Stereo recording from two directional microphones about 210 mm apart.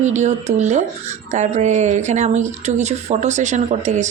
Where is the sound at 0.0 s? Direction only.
35° right (ahead or behind).